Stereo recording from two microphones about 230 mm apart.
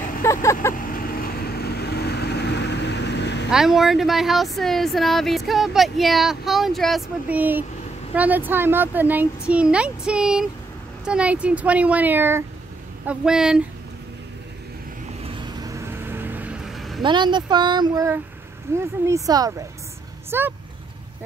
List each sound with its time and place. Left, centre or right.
0.2 s vehicle: centre
0.7 s vehicle: left
3.4 s speech: centre
15.2 s vehicle: centre
17.0 s speech: centre